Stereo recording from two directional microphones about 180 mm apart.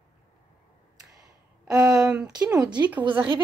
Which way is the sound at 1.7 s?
20° right (ahead or behind).